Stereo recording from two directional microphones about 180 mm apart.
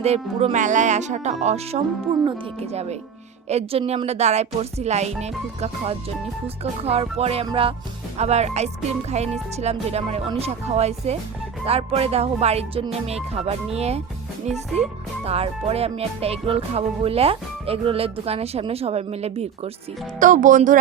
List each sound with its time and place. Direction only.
0.0 s speech: 35° right (ahead or behind)
20.1 s speech: 45° right (ahead or behind)